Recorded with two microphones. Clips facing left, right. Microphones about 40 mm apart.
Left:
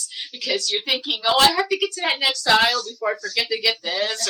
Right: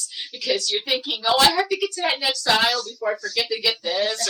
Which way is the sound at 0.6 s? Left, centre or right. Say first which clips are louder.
Even; left.